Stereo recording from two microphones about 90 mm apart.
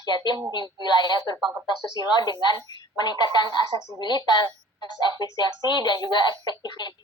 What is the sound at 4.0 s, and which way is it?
A woman's voice, 55° left (ahead or behind).